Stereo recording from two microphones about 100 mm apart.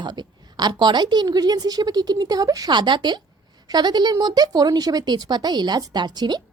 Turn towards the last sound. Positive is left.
turn(degrees=-45)  # may be behind; listen again after turning